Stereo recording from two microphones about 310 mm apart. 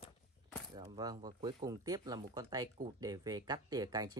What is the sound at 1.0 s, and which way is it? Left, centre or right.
Speech, centre.